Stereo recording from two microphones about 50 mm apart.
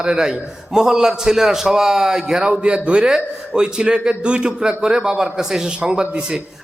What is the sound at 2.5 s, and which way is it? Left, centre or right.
A man's voice, right.